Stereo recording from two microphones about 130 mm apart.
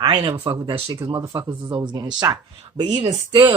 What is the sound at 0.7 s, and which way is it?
Speech, 30° right (ahead or behind).